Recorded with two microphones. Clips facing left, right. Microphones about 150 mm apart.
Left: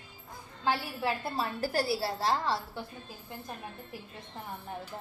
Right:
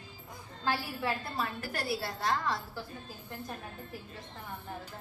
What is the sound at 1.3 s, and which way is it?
A woman's voice, 30° left (ahead or behind).